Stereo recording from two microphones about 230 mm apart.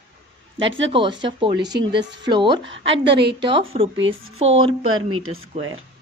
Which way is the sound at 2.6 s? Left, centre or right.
Right.